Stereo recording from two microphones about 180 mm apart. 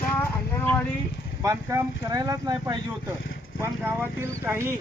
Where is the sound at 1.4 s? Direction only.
20° right (ahead or behind).